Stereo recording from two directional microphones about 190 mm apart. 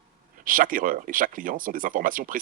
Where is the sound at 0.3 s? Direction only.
45° right (ahead or behind).